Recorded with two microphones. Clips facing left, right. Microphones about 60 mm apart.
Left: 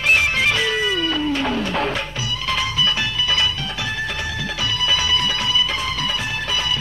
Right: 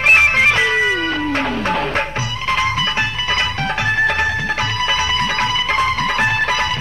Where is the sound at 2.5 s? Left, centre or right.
Right.